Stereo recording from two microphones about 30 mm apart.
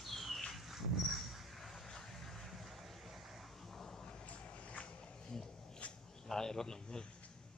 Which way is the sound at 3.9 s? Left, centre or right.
Centre.